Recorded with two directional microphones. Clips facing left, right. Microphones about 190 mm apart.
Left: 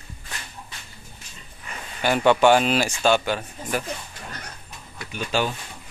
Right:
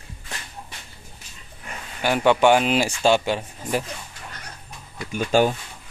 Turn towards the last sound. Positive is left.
turn(degrees=-45)  # may be behind; listen again after turning